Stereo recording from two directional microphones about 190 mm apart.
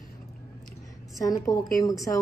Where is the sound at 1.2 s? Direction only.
20° left (ahead or behind).